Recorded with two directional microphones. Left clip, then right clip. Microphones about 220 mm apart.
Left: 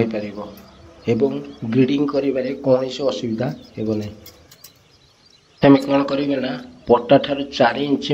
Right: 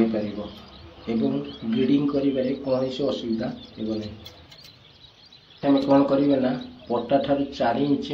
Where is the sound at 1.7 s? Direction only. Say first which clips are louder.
Left 5 dB; 45° left (ahead or behind).